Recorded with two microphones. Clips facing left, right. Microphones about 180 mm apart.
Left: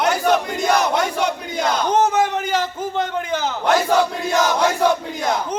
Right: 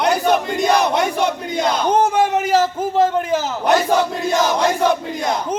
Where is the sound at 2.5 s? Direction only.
35° right (ahead or behind).